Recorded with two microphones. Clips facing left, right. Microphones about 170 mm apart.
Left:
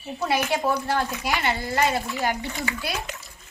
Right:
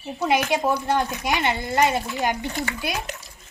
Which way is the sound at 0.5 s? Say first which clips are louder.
Right 2 dB; 20° right (ahead or behind).